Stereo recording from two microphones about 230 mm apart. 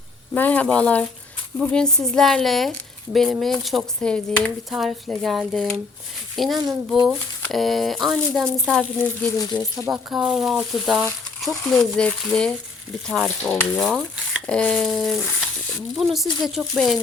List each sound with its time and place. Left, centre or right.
0.3 s speech: centre
6.6 s speech: centre
7.4 s speech: centre
9.9 s speech: centre